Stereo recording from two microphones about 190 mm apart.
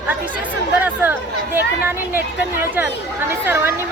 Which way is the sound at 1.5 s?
10° right (ahead or behind).